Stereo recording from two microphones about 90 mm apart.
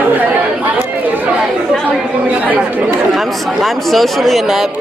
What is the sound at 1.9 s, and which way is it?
Speech, 15° right (ahead or behind).